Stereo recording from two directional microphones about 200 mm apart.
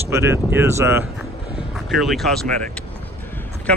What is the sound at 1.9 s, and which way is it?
Speech, centre (ahead or behind).